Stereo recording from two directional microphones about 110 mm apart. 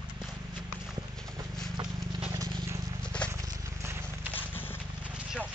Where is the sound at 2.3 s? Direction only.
30° right (ahead or behind).